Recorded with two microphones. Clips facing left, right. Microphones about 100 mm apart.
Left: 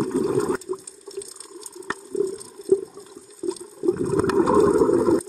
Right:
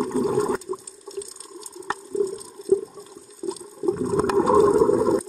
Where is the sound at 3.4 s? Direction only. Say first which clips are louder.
Left 2 dB; centre (ahead or behind).